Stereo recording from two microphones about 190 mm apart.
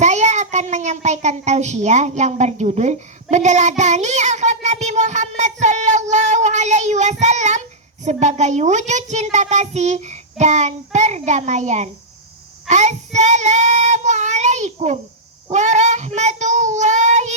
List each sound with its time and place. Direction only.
0.0 s a child's voice: 35° right (ahead or behind)
13.1 s child singing: 40° right (ahead or behind)